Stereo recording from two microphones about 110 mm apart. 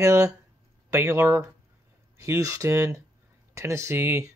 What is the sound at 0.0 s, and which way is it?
Speech, 30° right (ahead or behind).